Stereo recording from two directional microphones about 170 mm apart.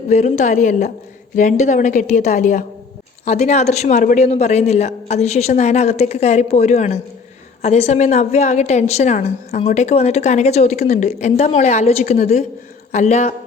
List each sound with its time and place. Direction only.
0.1 s a woman's voice: 45° left (ahead or behind)